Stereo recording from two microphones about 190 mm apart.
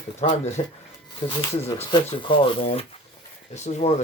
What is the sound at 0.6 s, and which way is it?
Speech, 30° left (ahead or behind).